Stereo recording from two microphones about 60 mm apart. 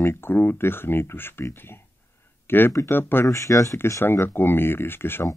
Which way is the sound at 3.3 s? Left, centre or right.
Left.